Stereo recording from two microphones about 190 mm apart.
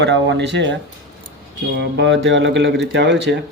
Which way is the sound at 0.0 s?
70° right (ahead or behind).